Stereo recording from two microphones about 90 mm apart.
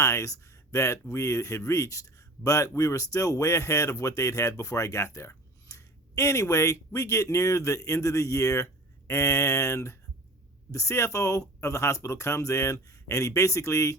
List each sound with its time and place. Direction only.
0.0 s speech: 35° left (ahead or behind)